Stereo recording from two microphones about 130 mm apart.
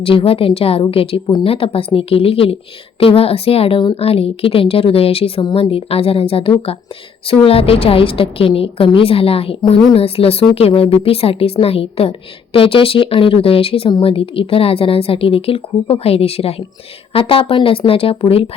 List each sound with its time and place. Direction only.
0.0 s a woman's voice: 45° left (ahead or behind)